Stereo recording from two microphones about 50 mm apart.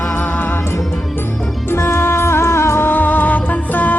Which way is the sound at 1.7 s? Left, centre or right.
Left.